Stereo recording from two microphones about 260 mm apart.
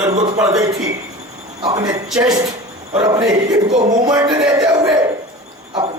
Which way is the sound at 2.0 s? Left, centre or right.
Centre.